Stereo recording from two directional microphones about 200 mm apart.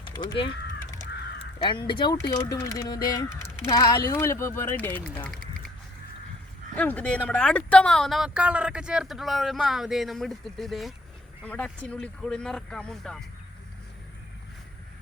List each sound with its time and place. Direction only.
0.0 s caw: 20° left (ahead or behind)
1.5 s speech: 25° left (ahead or behind); by 5.4 s 5° left (ahead or behind)
6.7 s speech: 5° left (ahead or behind)